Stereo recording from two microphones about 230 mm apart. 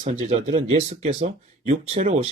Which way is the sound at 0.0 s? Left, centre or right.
Right.